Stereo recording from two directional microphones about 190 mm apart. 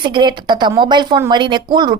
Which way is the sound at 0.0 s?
25° right (ahead or behind).